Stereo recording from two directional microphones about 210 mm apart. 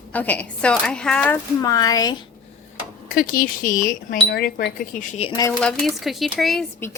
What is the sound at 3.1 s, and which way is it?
Speech, 40° left (ahead or behind).